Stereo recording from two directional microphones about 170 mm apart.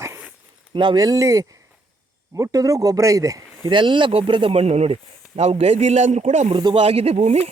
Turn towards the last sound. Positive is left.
turn(degrees=-40)  # may be behind; listen again after turning